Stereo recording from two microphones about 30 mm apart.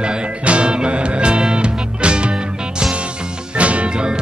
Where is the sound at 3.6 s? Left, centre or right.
Right.